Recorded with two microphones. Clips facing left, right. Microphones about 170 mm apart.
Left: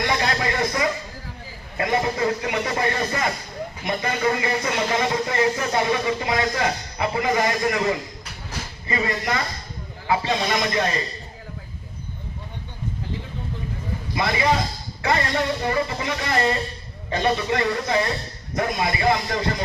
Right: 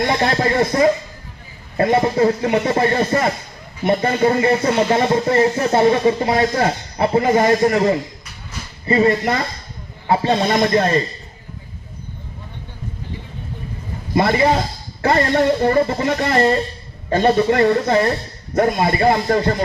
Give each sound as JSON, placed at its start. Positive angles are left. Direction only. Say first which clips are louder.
{"t": 0.1, "sound": "speech", "louder": "right 6 dB", "side_deg": -35}
{"t": 10.2, "sound": "speech", "louder": "right 7 dB", "side_deg": -45}
{"t": 14.1, "sound": "speech", "louder": "right 6 dB", "side_deg": -50}